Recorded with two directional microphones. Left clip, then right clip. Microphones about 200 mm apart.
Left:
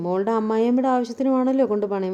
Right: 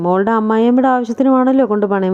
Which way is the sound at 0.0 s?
20° right (ahead or behind).